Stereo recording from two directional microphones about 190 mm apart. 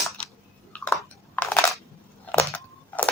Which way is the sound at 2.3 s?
10° left (ahead or behind).